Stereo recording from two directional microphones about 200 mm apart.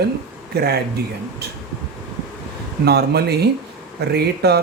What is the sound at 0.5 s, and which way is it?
Speech, 55° right (ahead or behind).